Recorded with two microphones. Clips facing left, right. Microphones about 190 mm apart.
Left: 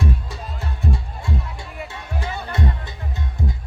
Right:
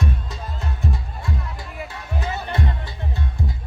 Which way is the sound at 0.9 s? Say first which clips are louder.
Left 3 dB; 25° left (ahead or behind).